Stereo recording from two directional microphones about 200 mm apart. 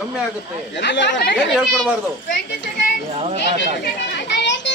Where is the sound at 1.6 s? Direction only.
Centre (ahead or behind).